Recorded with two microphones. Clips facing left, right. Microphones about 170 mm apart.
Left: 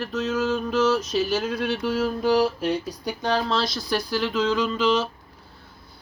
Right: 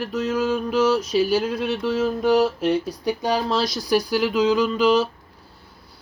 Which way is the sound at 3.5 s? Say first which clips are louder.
Right 2 dB; 40° right (ahead or behind).